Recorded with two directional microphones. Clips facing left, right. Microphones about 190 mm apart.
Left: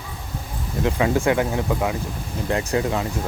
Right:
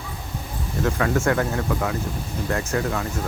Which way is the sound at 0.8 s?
15° left (ahead or behind).